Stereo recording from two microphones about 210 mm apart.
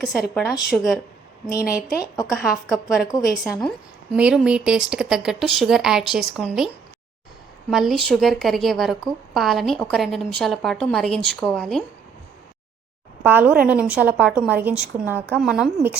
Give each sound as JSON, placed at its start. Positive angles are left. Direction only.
{"t": 0.0, "sound": "a woman's voice", "side_deg": 0}
{"t": 1.5, "sound": "speech", "side_deg": 15}
{"t": 2.3, "sound": "a woman's voice", "side_deg": 0}
{"t": 7.7, "sound": "a woman's voice", "side_deg": 0}
{"t": 13.2, "sound": "a woman's voice", "side_deg": -10}